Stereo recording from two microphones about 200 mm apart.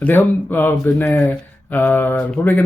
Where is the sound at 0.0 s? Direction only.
10° left (ahead or behind).